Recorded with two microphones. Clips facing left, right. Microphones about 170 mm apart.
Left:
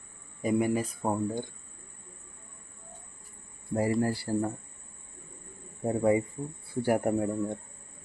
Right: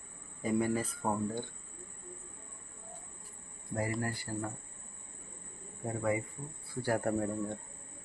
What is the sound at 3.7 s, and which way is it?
Speech, 30° left (ahead or behind).